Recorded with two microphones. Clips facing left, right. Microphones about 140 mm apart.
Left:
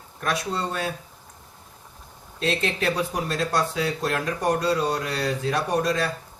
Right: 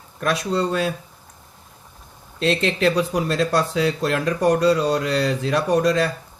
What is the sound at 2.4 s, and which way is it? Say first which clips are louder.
Speech: right 6 dB; 80° right.